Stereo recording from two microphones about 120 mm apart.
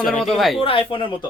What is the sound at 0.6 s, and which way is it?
Speech, 50° left (ahead or behind).